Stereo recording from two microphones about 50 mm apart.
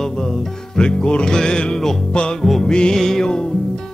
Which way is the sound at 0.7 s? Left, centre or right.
Centre.